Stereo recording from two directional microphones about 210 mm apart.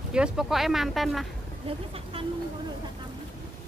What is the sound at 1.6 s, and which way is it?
Speech, 25° right (ahead or behind).